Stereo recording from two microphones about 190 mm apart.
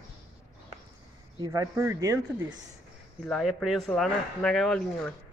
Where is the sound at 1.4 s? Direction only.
15° right (ahead or behind).